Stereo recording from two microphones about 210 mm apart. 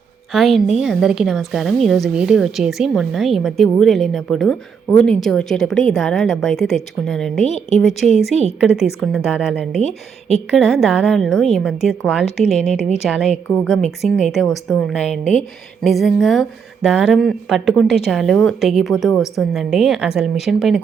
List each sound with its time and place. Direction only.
0.3 s a woman's voice: centre (ahead or behind)
7.4 s a woman's voice: 30° left (ahead or behind)
7.8 s a woman's voice: centre (ahead or behind)